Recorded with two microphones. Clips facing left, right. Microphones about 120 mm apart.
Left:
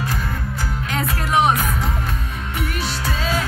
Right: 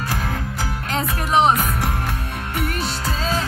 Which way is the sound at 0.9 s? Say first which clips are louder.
Right 1 dB; 25° right (ahead or behind).